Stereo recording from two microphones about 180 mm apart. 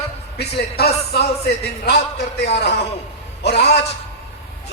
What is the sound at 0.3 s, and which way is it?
Speech, 65° left (ahead or behind).